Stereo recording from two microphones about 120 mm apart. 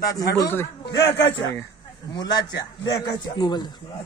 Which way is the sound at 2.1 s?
35° left (ahead or behind).